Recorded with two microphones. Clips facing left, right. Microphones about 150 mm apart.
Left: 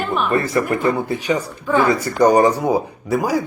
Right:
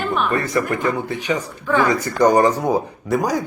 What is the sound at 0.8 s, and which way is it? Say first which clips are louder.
A woman's voice: left 3 dB; 10° left (ahead or behind).